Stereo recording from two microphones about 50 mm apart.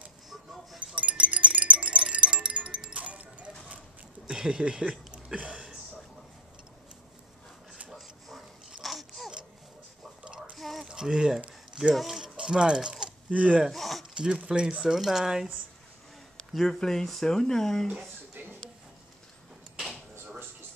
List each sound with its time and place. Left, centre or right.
0.7 s music: right
4.3 s speech: centre
8.8 s a sound: centre
10.5 s a sound: centre
10.9 s speech: centre
13.3 s speech: right
13.7 s a sound: centre
14.1 s speech: centre
16.5 s speech: centre